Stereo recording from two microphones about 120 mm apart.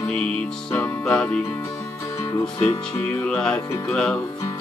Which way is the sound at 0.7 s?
10° left (ahead or behind).